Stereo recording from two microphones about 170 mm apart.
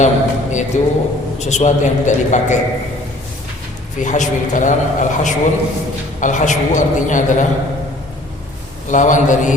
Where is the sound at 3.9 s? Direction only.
45° left (ahead or behind).